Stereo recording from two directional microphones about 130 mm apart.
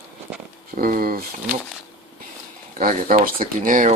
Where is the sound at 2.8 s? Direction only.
90° right.